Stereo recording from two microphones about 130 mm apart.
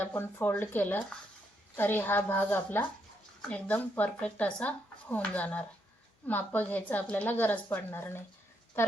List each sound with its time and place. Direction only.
0.0 s speech: 15° left (ahead or behind)